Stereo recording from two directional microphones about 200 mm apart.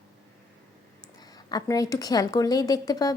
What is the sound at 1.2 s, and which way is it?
A woman's voice, 20° left (ahead or behind).